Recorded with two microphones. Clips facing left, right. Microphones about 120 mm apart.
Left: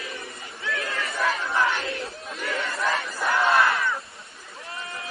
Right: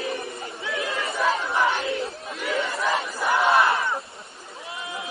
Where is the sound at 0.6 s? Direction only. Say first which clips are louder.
Right 1 dB; 15° right (ahead or behind).